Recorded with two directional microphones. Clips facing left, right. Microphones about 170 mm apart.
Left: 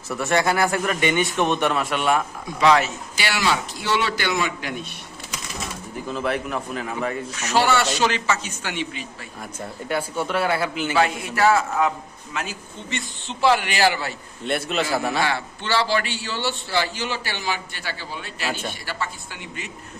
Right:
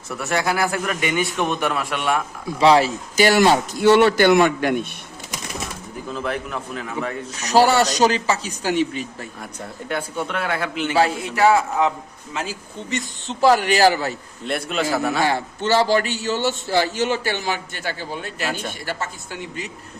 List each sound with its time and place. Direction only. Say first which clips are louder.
0.2 s a man's voice: left 1 dB; centre (ahead or behind)
2.6 s speech: right 3 dB; 30° right (ahead or behind)
3.2 s a man's voice: right 9 dB; 45° right (ahead or behind)
6.1 s a man's voice: left 1 dB; 5° left (ahead or behind)
7.3 s a man's voice: right 5 dB; 40° right (ahead or behind)
9.6 s a man's voice: left 1 dB; 5° left (ahead or behind)
10.9 s a man's voice: right 2 dB; 35° right (ahead or behind)
11.3 s a man's voice: right 2 dB; 15° right (ahead or behind)
12.3 s speech: right 2 dB; 30° right (ahead or behind)
12.9 s a man's voice: right 4 dB; 40° right (ahead or behind)
14.4 s a man's voice: even; centre (ahead or behind)
15.2 s a man's voice: right 4 dB; 45° right (ahead or behind)